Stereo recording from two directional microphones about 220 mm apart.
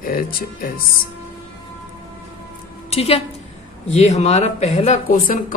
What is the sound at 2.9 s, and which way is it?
A woman's voice, 25° left (ahead or behind).